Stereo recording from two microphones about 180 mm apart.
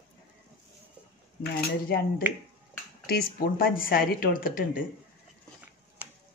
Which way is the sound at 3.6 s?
55° left (ahead or behind).